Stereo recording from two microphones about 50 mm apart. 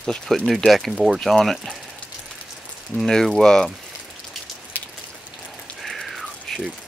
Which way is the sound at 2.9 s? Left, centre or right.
Left.